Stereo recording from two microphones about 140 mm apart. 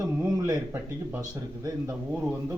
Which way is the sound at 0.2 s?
25° right (ahead or behind).